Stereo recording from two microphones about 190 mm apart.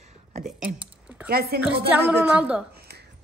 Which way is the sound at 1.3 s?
55° right (ahead or behind).